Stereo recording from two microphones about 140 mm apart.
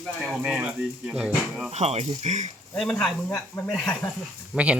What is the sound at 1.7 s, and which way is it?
Speech, 50° right (ahead or behind).